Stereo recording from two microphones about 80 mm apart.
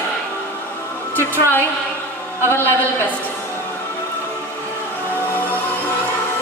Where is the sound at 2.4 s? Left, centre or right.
Left.